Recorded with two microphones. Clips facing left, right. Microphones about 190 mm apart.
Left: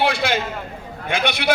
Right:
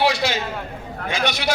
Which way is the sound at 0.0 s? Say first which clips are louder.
Even; 55° left (ahead or behind).